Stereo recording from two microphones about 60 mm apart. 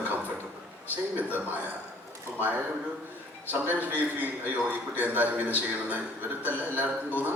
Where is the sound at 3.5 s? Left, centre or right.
Right.